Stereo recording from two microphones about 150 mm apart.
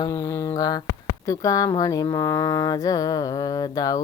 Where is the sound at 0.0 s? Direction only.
20° left (ahead or behind).